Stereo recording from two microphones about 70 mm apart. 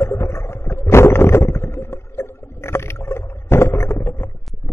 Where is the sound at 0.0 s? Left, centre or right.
Left.